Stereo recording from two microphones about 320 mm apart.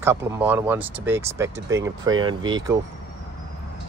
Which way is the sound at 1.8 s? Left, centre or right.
Right.